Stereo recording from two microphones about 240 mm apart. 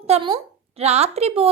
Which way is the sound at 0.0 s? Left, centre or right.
Right.